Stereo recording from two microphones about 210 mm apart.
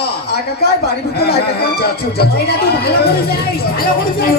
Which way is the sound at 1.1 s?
50° left (ahead or behind).